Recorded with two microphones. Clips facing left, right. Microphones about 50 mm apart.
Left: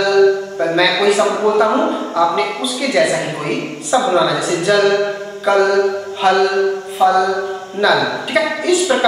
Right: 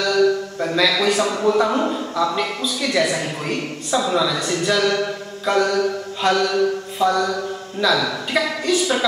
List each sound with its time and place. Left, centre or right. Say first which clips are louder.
0.0 s a man's voice: left 5 dB; centre